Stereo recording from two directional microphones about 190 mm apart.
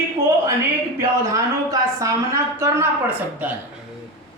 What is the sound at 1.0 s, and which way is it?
A woman's voice, 15° right (ahead or behind).